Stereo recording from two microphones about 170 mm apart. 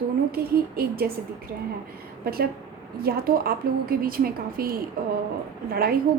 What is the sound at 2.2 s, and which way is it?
A woman's voice, 60° right (ahead or behind).